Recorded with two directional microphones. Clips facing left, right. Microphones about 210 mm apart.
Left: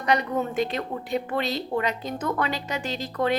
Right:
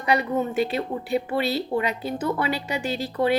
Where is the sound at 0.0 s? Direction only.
10° right (ahead or behind).